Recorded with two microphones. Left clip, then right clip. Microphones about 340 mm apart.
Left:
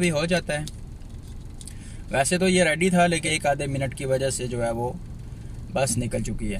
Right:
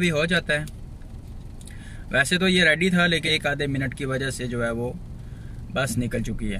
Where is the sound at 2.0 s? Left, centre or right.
Left.